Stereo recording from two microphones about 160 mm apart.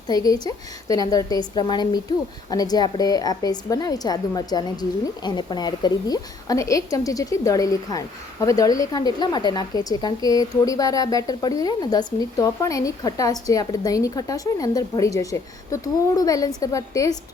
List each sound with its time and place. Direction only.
0.1 s a woman's voice: 25° left (ahead or behind)